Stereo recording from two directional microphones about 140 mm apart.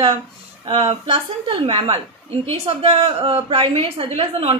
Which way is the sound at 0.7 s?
40° right (ahead or behind).